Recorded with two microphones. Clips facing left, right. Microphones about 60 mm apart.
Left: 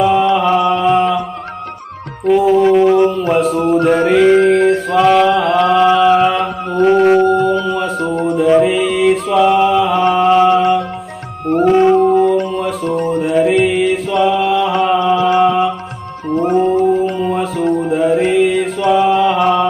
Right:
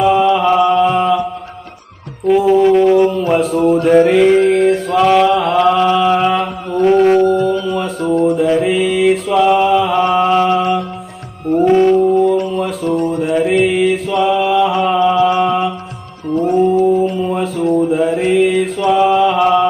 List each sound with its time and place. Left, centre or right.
0.0 s mantra: centre
2.2 s mantra: centre
3.8 s music: centre
6.8 s a sound: centre
7.2 s howl: left
7.6 s music: centre
11.9 s a sound: left
12.5 s music: centre
13.1 s mantra: centre
16.3 s music: left
17.2 s music: centre
17.6 s a sound: left
17.9 s mantra: centre